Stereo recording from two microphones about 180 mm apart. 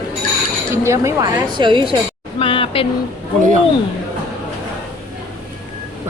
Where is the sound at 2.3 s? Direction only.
30° left (ahead or behind).